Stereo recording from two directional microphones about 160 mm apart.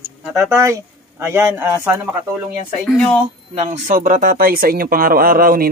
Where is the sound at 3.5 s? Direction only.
50° right (ahead or behind).